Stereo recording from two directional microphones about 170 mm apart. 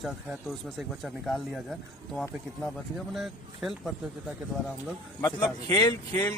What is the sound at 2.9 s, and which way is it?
Speech, centre (ahead or behind).